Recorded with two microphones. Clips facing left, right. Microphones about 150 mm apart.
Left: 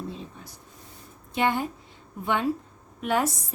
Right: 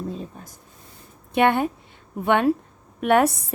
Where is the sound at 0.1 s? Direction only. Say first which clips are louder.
Right 5 dB; 45° right (ahead or behind).